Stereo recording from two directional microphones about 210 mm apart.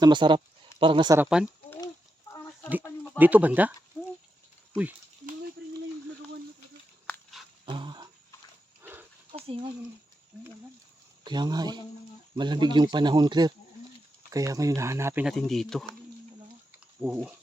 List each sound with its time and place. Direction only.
0.0 s speech: 20° right (ahead or behind)
1.2 s speech: 5° right (ahead or behind)
3.0 s speech: 10° right (ahead or behind)
5.6 s a sound: 50° right (ahead or behind)
7.1 s wild animals: centre (ahead or behind)
7.6 s a sound: 25° right (ahead or behind)
8.8 s livestock: 10° right (ahead or behind)
9.3 s a sound: 30° right (ahead or behind)
11.2 s speech: 20° right (ahead or behind); by 15.9 s centre (ahead or behind)
17.0 s speech: 5° right (ahead or behind)